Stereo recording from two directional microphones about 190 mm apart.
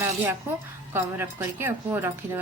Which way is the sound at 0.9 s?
10° right (ahead or behind).